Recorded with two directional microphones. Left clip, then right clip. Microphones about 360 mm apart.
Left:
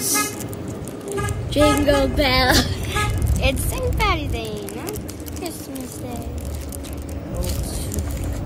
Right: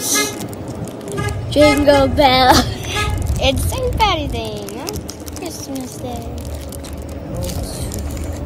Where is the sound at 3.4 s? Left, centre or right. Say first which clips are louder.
Right 6 dB; centre.